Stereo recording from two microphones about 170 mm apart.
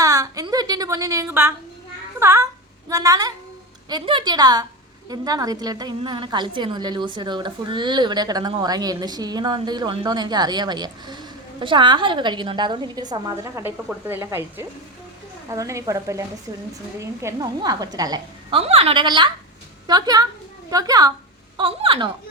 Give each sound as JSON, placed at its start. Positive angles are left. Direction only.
{"t": 0.0, "sound": "a woman's voice", "side_deg": -20}
{"t": 18.5, "sound": "a woman's voice", "side_deg": -35}
{"t": 21.6, "sound": "a woman's voice", "side_deg": -35}